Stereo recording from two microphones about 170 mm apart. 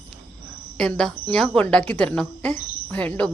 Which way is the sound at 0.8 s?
5° left (ahead or behind).